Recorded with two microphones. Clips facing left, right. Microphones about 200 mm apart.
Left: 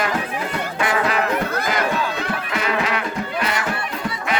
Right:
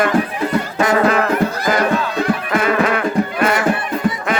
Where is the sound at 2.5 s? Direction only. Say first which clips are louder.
Right 6 dB; 50° right (ahead or behind).